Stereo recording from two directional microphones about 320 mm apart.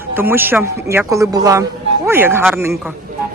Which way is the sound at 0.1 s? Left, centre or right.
Centre.